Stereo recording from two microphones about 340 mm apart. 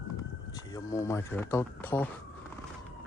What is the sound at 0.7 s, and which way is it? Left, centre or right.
Speech, centre.